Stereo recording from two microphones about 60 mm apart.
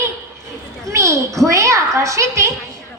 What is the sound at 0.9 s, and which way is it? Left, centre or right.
A woman's voice, right.